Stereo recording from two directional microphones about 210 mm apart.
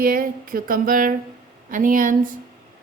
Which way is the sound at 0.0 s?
45° right (ahead or behind).